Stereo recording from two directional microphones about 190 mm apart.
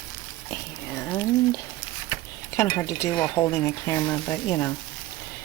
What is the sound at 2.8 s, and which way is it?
Speech, 15° left (ahead or behind).